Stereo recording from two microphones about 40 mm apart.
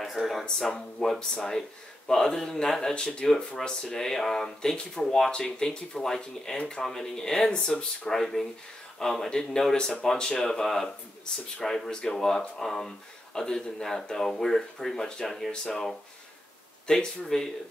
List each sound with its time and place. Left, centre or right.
0.0 s speech: centre
0.7 s speech: centre
2.9 s speech: left
3.3 s speech: centre
6.5 s speech: left
6.8 s speech: centre
16.9 s speech: centre